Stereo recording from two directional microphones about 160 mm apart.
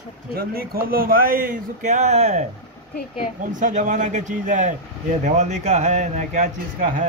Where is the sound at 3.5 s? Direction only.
50° right (ahead or behind).